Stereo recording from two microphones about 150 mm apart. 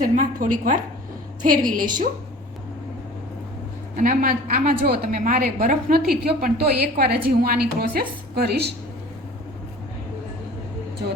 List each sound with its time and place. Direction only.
0.0 s a woman's voice: 65° right (ahead or behind)
3.9 s a woman's voice: 65° right (ahead or behind); by 8.7 s 90° right